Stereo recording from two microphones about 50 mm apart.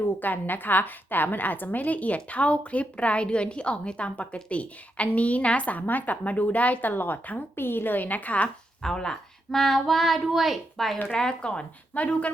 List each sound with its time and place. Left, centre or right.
0.2 s a woman's voice: left
8.8 s speech: centre
11.2 s a woman's voice: centre